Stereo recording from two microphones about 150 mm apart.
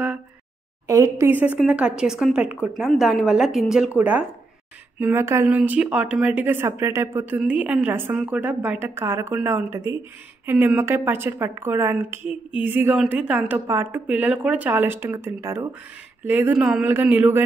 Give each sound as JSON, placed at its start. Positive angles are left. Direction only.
{"t": 0.8, "sound": "speech", "side_deg": -20}